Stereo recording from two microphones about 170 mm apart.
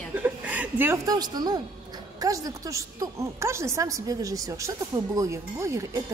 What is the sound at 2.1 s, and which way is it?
A woman's voice, 20° right (ahead or behind).